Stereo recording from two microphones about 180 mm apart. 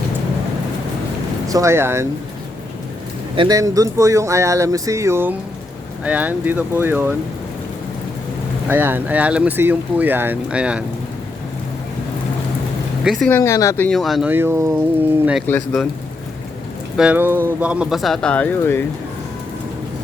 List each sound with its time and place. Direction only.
1.5 s speech: 15° right (ahead or behind)
3.3 s speech: 20° right (ahead or behind)
8.7 s speech: 10° right (ahead or behind)
13.1 s speech: centre (ahead or behind)
13.3 s speech: 15° left (ahead or behind); by 14.7 s 15° right (ahead or behind)
15.4 s speech: 5° left (ahead or behind)
17.0 s speech: 10° right (ahead or behind); by 18.9 s 10° left (ahead or behind)